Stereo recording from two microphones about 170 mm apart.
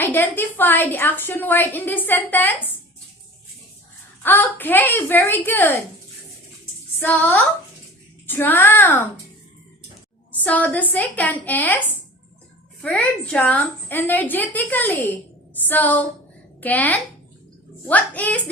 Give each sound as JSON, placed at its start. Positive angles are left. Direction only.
{"t": 0.0, "sound": "a woman's voice", "side_deg": 10}
{"t": 4.2, "sound": "a woman's voice", "side_deg": 10}
{"t": 7.0, "sound": "a woman's voice", "side_deg": 10}
{"t": 10.3, "sound": "a woman's voice", "side_deg": 10}